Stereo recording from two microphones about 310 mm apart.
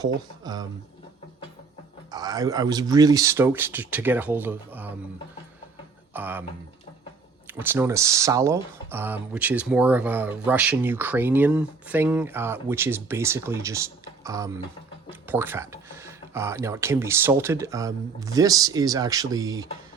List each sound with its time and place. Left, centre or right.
0.0 s speech: centre
2.0 s speech: centre
6.1 s speech: centre
7.4 s speech: centre